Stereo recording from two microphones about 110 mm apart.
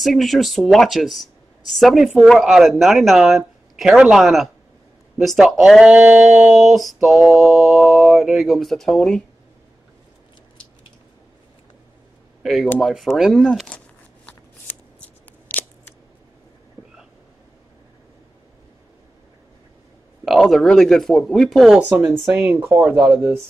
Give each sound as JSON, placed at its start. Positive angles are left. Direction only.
{"t": 0.0, "sound": "speech", "side_deg": 0}
{"t": 6.5, "sound": "speech", "side_deg": 0}
{"t": 12.8, "sound": "speech", "side_deg": 0}
{"t": 14.2, "sound": "shuffling cards", "side_deg": 15}
{"t": 20.2, "sound": "speech", "side_deg": 0}
{"t": 21.8, "sound": "speech", "side_deg": -15}